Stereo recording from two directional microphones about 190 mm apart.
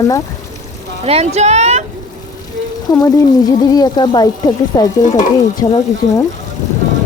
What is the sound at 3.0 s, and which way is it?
Speech, 20° left (ahead or behind).